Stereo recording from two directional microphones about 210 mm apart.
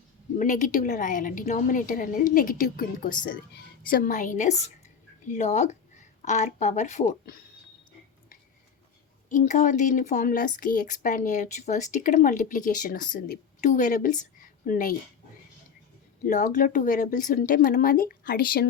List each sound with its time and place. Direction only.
0.3 s speech: 35° left (ahead or behind)
9.3 s a woman's voice: 35° left (ahead or behind)
16.2 s speech: 40° left (ahead or behind)